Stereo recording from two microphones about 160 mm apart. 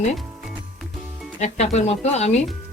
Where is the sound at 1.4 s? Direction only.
45° left (ahead or behind).